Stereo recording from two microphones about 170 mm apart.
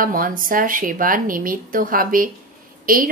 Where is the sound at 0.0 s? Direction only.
55° right (ahead or behind).